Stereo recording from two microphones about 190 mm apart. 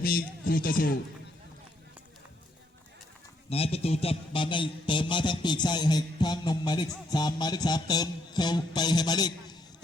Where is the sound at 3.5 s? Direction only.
30° left (ahead or behind).